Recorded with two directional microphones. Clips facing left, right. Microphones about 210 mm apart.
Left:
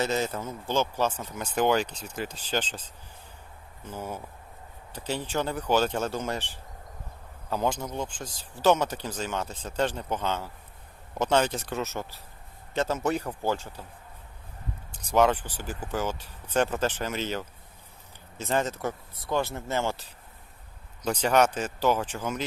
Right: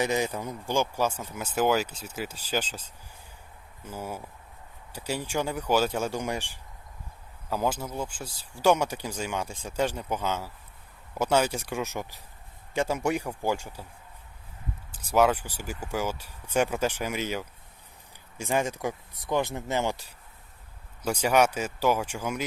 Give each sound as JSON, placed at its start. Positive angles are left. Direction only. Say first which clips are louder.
{"t": 0.0, "sound": "speech", "louder": "right 1 dB", "side_deg": -15}
{"t": 3.8, "sound": "speech", "louder": "even", "side_deg": -10}
{"t": 14.9, "sound": "speech", "louder": "even", "side_deg": -10}